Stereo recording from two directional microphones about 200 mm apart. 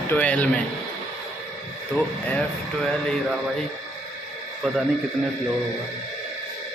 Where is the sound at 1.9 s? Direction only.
5° left (ahead or behind).